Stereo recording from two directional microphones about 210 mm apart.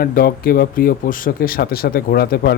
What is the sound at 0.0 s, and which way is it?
Speech, 45° left (ahead or behind).